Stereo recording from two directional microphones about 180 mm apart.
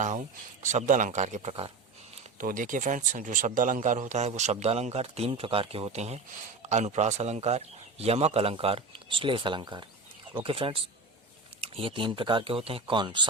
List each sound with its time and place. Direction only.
0.6 s speech: 45° right (ahead or behind)
2.4 s speech: 50° right (ahead or behind); by 13.2 s 25° right (ahead or behind)